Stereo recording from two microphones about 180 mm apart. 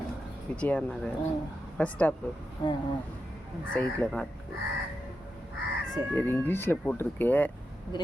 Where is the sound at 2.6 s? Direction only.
25° left (ahead or behind).